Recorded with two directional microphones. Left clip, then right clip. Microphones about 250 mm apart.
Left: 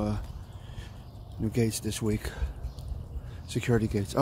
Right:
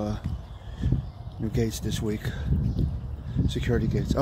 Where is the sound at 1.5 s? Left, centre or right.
Centre.